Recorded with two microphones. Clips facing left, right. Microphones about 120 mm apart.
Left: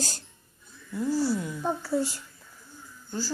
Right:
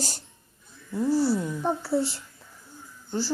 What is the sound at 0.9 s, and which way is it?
A woman's voice, 30° right (ahead or behind).